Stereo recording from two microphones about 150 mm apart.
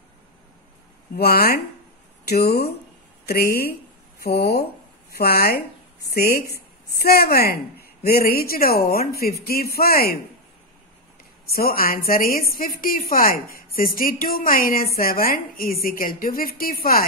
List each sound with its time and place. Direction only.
1.1 s a woman's voice: 90° left
11.5 s a woman's voice: 85° left